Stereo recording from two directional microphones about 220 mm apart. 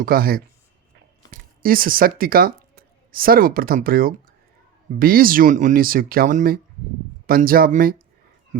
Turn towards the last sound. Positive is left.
turn(degrees=-40)  # may be behind; listen again after turning